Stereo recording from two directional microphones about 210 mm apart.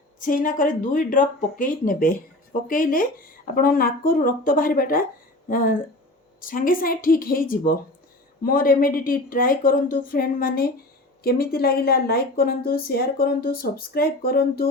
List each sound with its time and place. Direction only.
0.2 s speech: 40° left (ahead or behind)